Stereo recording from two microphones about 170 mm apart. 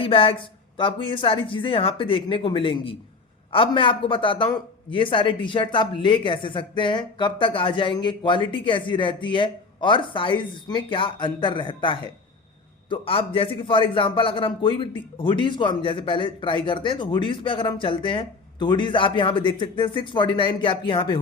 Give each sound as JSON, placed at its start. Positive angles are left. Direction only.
{"t": 0.0, "sound": "speech", "side_deg": 35}